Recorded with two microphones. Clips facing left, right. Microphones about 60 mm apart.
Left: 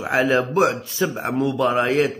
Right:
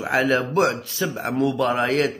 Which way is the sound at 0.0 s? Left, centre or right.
Centre.